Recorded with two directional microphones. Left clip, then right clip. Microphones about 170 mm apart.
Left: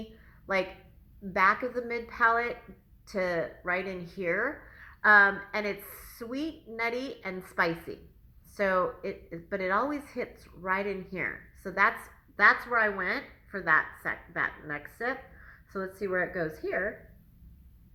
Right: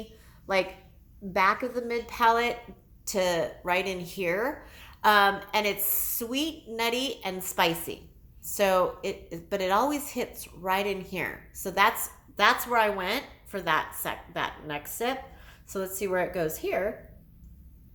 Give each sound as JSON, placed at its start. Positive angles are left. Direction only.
{"t": 1.3, "sound": "a woman's voice", "side_deg": -25}